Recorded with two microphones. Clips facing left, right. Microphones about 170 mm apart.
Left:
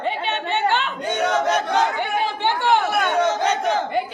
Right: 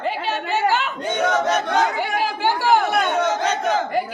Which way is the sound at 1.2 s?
10° left (ahead or behind).